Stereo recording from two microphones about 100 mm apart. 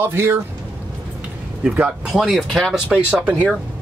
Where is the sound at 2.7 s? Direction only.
10° right (ahead or behind).